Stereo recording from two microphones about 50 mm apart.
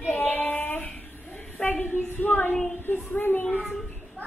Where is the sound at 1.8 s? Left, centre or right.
Left.